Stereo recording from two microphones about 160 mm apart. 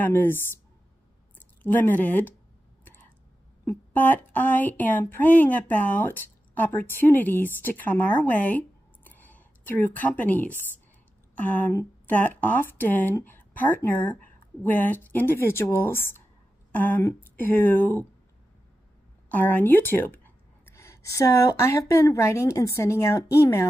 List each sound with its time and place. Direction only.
0.0 s speech: 15° left (ahead or behind)
1.6 s speech: 10° left (ahead or behind)
2.8 s a sound: 10° left (ahead or behind)
3.6 s speech: 10° left (ahead or behind)
19.3 s speech: 10° left (ahead or behind)